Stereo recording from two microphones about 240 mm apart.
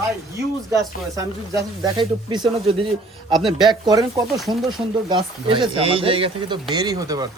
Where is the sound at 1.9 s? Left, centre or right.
Centre.